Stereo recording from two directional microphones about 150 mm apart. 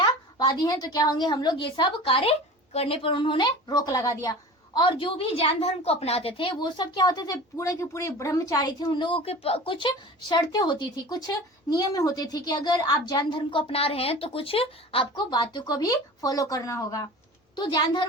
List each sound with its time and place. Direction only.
0.0 s a woman's voice: 30° left (ahead or behind)
17.5 s a woman's voice: 30° left (ahead or behind)